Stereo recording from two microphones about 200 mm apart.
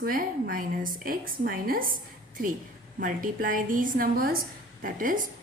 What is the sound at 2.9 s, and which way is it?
A woman's voice, 45° right (ahead or behind).